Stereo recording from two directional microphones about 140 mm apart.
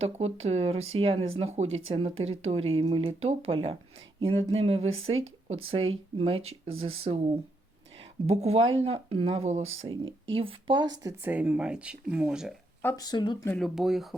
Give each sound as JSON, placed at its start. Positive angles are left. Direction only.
{"t": 0.0, "sound": "speech", "side_deg": -50}
{"t": 8.3, "sound": "speech", "side_deg": -50}
{"t": 11.2, "sound": "speech", "side_deg": -10}
{"t": 13.0, "sound": "speech", "side_deg": 30}
{"t": 13.6, "sound": "speech", "side_deg": -5}